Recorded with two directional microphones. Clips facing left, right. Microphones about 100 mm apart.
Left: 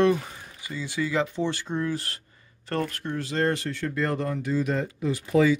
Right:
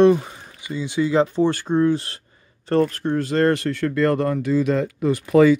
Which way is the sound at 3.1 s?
50° right (ahead or behind).